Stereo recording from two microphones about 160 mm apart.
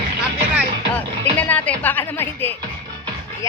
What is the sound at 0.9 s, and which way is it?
Music, 10° left (ahead or behind).